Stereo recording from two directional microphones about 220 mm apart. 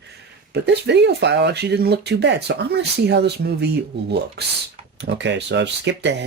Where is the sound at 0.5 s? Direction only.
50° right (ahead or behind).